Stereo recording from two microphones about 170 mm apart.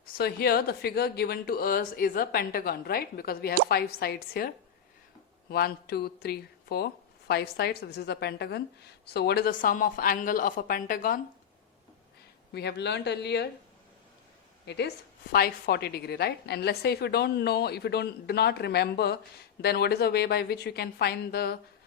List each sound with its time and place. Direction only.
0.2 s a woman's voice: 65° left (ahead or behind)
12.5 s speech: 75° left (ahead or behind)
14.7 s speech: 75° left (ahead or behind)